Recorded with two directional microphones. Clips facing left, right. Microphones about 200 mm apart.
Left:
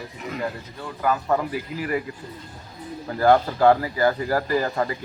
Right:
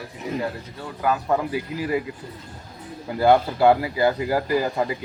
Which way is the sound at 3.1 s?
10° right (ahead or behind).